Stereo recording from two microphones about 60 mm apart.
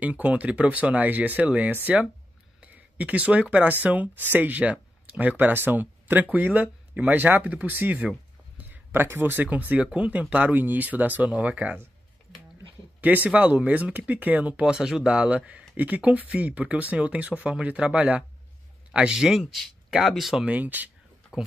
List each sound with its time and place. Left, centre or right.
0.0 s speech: right
8.5 s a sound: right
9.0 s speech: right
13.0 s speech: right
14.6 s speech: centre
18.9 s speech: centre
20.4 s speech: right